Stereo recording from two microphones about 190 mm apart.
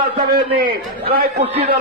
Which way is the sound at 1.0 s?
55° right (ahead or behind).